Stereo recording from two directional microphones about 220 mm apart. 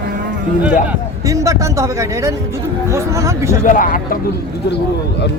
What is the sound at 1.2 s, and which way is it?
Speech, 15° right (ahead or behind).